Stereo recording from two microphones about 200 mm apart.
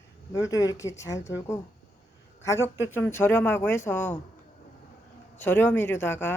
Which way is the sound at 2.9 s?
10° left (ahead or behind).